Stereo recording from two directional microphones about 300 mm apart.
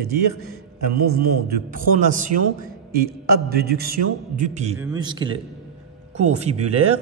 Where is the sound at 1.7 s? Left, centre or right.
Right.